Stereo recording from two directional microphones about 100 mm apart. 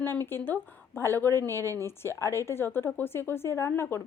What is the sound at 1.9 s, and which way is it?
Speech, 25° left (ahead or behind).